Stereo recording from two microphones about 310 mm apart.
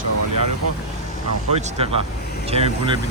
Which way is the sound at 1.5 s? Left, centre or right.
Centre.